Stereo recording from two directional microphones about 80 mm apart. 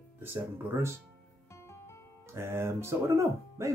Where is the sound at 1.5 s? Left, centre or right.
Left.